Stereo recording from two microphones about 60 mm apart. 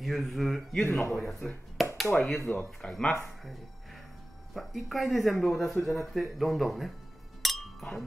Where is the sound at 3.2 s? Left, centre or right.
Centre.